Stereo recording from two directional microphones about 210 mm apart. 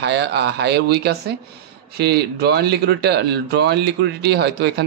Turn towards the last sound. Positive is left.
turn(degrees=-50)  # may be behind; listen again after turning